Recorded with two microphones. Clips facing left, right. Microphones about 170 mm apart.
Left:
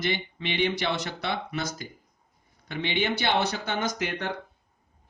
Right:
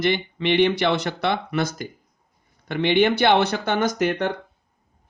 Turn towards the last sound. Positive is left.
turn(degrees=-55)  # may be behind; listen again after turning